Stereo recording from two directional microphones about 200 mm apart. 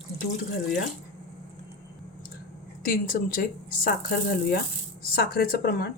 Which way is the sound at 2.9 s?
45° left (ahead or behind).